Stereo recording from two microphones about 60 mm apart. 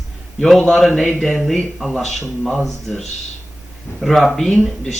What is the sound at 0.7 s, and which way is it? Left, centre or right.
Speech, centre.